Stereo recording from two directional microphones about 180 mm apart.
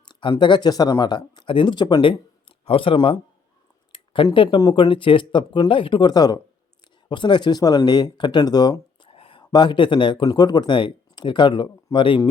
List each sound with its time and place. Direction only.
0.0 s speech: 25° left (ahead or behind)